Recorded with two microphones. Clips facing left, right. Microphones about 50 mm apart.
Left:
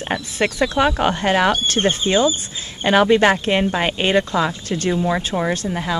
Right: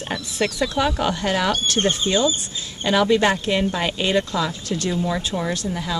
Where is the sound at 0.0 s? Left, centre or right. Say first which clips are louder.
Left 3 dB; left.